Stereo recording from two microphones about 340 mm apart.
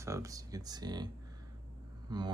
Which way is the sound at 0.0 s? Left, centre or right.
Centre.